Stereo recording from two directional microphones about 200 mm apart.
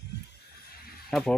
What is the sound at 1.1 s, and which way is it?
Speech, centre (ahead or behind).